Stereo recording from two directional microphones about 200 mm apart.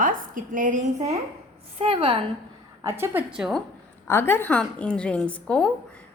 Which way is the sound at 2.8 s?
15° right (ahead or behind).